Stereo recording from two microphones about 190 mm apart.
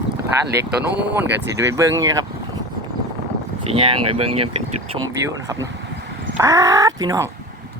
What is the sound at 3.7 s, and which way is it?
Speech, 30° right (ahead or behind).